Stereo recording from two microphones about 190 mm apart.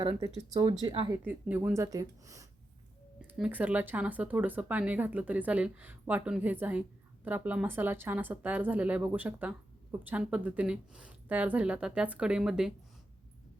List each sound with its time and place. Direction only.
0.0 s speech: 25° right (ahead or behind)
1.2 s speech: 10° right (ahead or behind)
3.2 s speech: 5° right (ahead or behind)